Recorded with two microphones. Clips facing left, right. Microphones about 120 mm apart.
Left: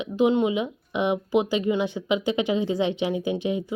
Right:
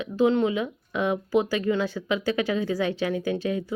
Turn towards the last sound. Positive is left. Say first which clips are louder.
# left 1 dB
turn(degrees=20)  # may be behind; listen again after turning